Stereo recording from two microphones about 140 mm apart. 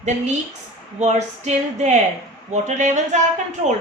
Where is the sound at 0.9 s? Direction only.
55° right (ahead or behind).